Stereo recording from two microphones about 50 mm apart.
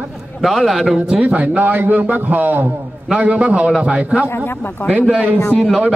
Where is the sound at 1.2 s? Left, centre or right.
Right.